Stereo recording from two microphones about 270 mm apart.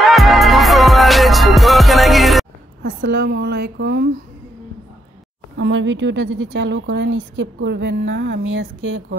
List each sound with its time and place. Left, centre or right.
0.1 s music: centre
2.8 s a woman's voice: right
5.6 s a woman's voice: right